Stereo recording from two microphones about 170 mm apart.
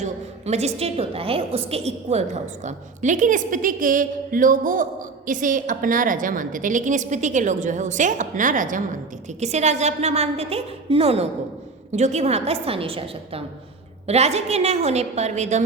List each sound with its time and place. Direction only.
0.0 s a woman's voice: 40° right (ahead or behind)